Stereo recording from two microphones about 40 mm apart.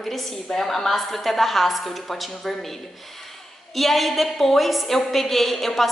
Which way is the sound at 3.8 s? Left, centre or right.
Centre.